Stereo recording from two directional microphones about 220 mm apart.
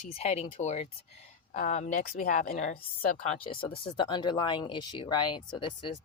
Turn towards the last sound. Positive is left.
turn(degrees=20)  # may be behind; listen again after turning